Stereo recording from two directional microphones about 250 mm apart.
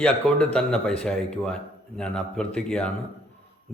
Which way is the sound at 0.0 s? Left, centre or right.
Centre.